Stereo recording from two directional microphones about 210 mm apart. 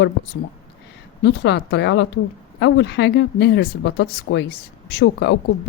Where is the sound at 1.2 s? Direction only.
55° left (ahead or behind).